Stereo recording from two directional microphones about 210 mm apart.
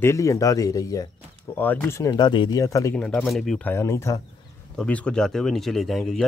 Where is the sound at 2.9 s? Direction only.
5° left (ahead or behind).